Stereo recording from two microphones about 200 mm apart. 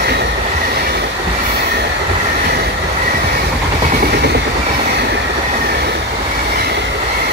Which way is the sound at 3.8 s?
45° right (ahead or behind).